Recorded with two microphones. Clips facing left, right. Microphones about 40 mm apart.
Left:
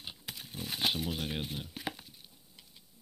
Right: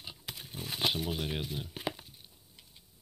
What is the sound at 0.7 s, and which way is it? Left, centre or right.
Speech, centre.